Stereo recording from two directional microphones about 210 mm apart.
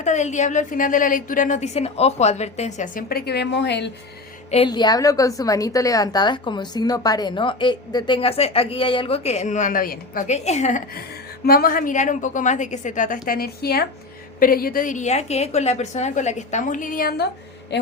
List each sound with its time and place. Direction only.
0.0 s a woman's voice: 35° left (ahead or behind); by 3.9 s 55° left (ahead or behind)
4.5 s a woman's voice: 25° left (ahead or behind); by 17.2 s 45° left (ahead or behind)